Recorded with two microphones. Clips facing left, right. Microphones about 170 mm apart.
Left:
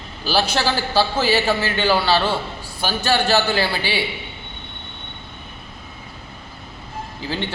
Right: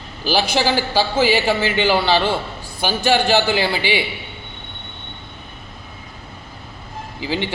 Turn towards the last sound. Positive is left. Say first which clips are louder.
# right 3 dB
turn(degrees=-15)  # may be behind; listen again after turning